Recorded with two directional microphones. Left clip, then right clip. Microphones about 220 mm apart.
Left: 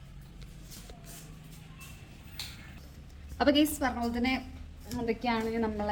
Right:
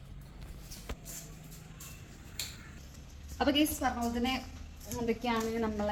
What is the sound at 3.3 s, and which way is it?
A woman's voice, 25° left (ahead or behind).